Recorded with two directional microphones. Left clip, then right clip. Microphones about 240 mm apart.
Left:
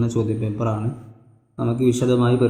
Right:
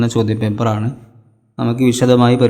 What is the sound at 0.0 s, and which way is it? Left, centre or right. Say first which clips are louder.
A man's voice: right 6 dB; right.